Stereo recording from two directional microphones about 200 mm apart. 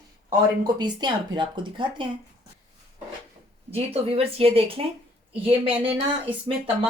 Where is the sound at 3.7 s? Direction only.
30° right (ahead or behind).